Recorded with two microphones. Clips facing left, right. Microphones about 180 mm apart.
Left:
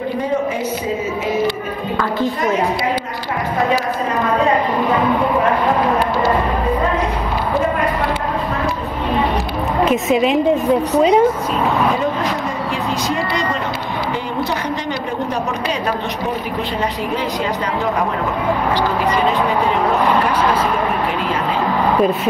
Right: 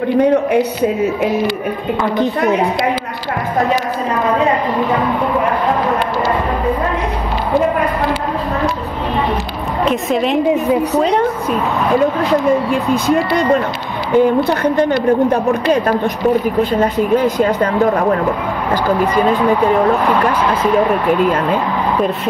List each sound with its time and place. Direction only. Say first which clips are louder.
0.2 s speech: right 9 dB; 65° right (ahead or behind)
9.8 s a woman's voice: even; 5° left (ahead or behind)
14.1 s a woman's voice: right 14 dB; 55° right (ahead or behind)